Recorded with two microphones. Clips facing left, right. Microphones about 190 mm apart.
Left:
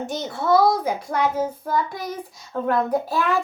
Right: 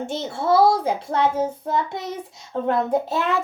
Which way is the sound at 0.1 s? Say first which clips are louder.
Left 1 dB; 25° right (ahead or behind).